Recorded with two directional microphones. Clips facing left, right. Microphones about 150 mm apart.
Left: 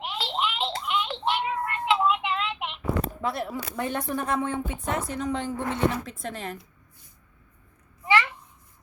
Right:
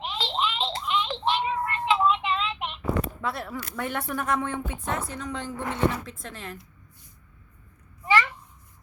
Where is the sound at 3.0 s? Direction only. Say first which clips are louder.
Left 2 dB; 35° left (ahead or behind).